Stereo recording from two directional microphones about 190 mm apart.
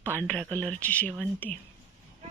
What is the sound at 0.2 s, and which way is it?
Speech, 5° left (ahead or behind).